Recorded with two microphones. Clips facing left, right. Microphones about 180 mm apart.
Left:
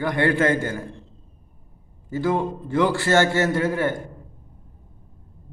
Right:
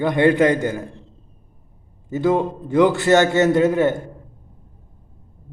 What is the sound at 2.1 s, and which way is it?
A man's voice, 20° right (ahead or behind).